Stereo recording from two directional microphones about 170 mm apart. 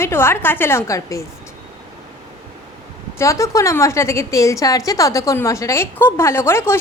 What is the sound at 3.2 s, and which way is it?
A woman's voice, 20° left (ahead or behind).